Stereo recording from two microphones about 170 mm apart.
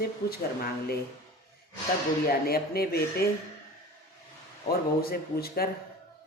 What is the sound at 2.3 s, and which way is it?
Speech, 65° left (ahead or behind).